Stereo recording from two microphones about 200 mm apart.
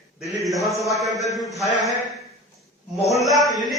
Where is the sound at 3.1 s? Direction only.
Centre (ahead or behind).